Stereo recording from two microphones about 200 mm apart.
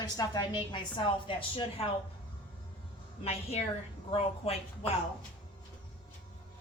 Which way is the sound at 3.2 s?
30° left (ahead or behind).